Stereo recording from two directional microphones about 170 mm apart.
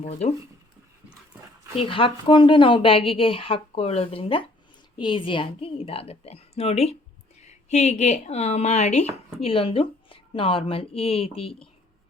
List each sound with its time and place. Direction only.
1.7 s speech: 35° left (ahead or behind)